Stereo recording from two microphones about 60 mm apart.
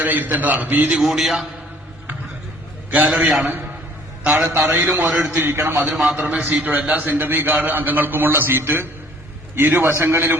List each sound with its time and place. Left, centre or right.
0.0 s a man's voice: right
0.9 s a man's voice: centre
2.9 s a man's voice: right
4.6 s a man's voice: right
5.0 s a man's voice: centre
5.3 s a man's voice: right
5.9 s a man's voice: centre
6.4 s a man's voice: right